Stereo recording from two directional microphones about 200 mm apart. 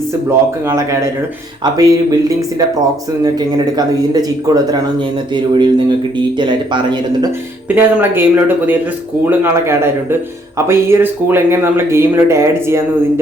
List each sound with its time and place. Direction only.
0.3 s speech: 15° right (ahead or behind)
3.2 s a man's voice: 20° right (ahead or behind)
7.8 s speech: 10° right (ahead or behind)